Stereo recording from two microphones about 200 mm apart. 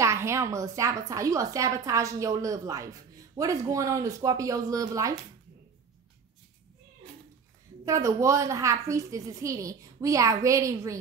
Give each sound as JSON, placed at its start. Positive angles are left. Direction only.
{"t": 0.0, "sound": "a woman's voice", "side_deg": -15}
{"t": 7.8, "sound": "a woman's voice", "side_deg": -15}